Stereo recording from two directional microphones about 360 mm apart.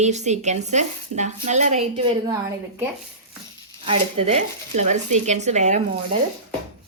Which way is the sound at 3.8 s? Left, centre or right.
Centre.